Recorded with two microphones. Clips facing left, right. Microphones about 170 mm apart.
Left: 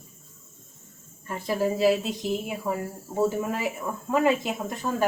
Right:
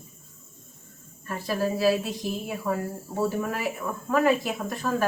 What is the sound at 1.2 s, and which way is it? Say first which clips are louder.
Speech: left 1 dB; 20° left (ahead or behind).